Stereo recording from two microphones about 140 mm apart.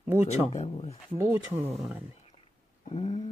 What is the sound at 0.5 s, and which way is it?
Speech, 50° left (ahead or behind).